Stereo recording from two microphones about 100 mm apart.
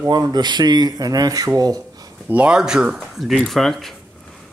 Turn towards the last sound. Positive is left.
turn(degrees=0)  # may be behind; listen again after turning